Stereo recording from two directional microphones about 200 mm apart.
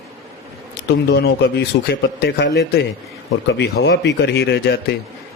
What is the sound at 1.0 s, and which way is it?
A man's voice, 55° left (ahead or behind).